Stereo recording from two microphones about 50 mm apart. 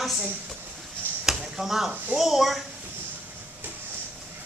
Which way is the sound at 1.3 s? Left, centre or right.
Centre.